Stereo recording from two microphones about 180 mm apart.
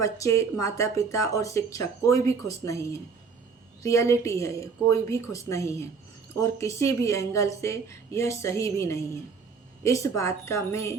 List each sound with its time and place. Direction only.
0.0 s speech: 15° left (ahead or behind)